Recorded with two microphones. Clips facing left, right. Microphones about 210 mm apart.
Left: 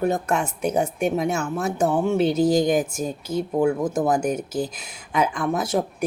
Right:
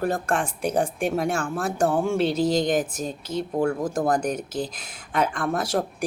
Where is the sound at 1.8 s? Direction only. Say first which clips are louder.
Left 1 dB; 20° left (ahead or behind).